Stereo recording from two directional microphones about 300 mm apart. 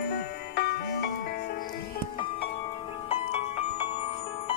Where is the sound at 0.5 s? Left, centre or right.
Left.